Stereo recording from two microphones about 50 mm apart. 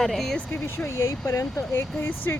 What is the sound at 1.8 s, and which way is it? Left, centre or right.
Speech, left.